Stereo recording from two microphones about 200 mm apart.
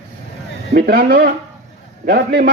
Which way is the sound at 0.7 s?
50° right (ahead or behind).